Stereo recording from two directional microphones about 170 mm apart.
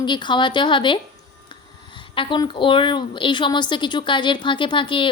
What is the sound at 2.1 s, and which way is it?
A woman's voice, 30° left (ahead or behind).